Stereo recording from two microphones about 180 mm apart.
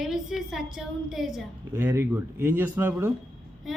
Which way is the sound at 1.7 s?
10° right (ahead or behind).